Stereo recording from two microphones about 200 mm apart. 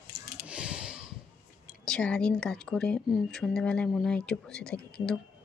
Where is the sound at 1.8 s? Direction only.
5° left (ahead or behind).